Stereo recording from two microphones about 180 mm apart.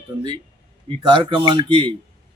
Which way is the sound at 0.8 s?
30° right (ahead or behind).